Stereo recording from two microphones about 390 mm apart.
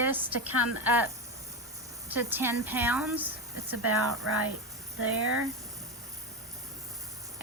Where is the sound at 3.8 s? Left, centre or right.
Right.